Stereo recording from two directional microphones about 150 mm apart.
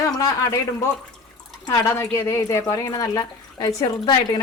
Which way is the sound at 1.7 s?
15° left (ahead or behind).